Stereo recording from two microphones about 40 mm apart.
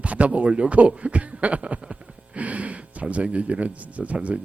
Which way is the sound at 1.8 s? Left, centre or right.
Right.